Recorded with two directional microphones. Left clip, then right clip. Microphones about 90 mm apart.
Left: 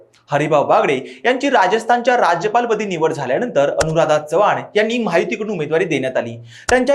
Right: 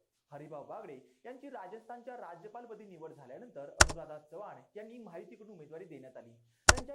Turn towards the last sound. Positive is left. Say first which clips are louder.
# left 12 dB
turn(degrees=0)  # may be behind; listen again after turning